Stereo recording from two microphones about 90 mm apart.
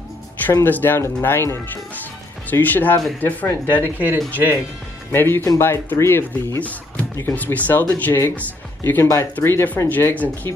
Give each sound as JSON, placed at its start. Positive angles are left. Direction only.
{"t": 0.5, "sound": "speech", "side_deg": 20}
{"t": 7.3, "sound": "speech", "side_deg": 20}